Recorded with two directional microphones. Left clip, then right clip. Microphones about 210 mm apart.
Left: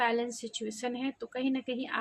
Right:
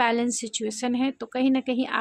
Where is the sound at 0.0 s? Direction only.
50° right (ahead or behind).